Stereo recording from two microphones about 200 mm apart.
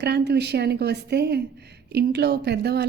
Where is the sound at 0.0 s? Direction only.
55° right (ahead or behind).